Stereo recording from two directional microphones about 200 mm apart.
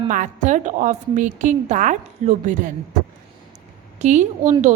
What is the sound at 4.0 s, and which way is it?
Speech, 35° right (ahead or behind).